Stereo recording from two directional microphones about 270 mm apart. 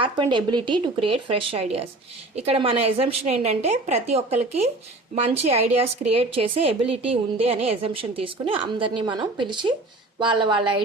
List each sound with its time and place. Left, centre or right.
0.0 s a woman's voice: centre